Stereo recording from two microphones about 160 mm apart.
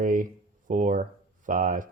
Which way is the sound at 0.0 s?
55° right (ahead or behind).